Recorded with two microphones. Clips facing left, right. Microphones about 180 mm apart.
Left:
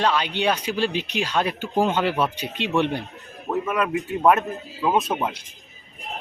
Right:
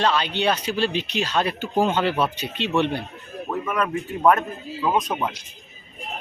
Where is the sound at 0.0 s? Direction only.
10° left (ahead or behind).